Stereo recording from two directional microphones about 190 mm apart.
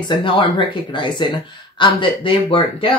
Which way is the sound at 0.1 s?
25° left (ahead or behind).